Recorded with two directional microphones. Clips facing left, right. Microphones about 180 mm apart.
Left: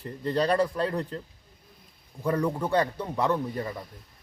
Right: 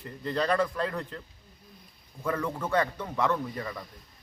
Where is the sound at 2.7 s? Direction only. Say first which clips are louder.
Left 2 dB; 35° left (ahead or behind).